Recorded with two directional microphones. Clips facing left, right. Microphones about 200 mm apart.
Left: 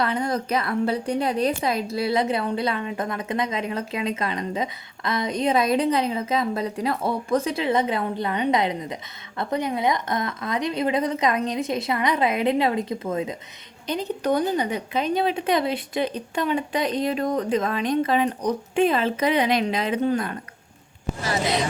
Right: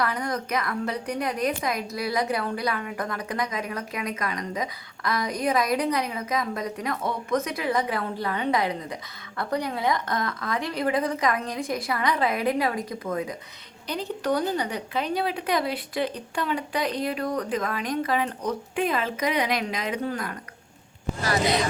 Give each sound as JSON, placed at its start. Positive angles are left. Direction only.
{"t": 0.0, "sound": "a woman's voice", "side_deg": 25}